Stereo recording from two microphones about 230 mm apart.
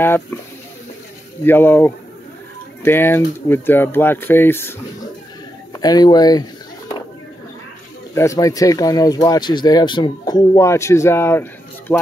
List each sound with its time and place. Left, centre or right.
0.0 s speech: centre
1.4 s speech: centre
8.1 s speech: centre